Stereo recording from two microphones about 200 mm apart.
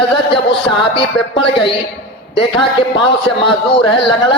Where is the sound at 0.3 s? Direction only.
25° left (ahead or behind).